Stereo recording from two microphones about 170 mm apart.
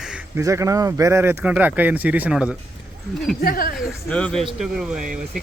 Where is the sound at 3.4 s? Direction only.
60° left (ahead or behind).